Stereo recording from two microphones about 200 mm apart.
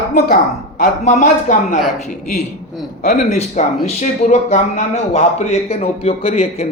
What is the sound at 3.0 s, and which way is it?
Speech, 35° left (ahead or behind).